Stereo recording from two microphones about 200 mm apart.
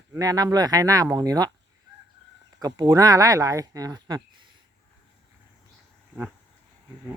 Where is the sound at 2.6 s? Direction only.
20° right (ahead or behind).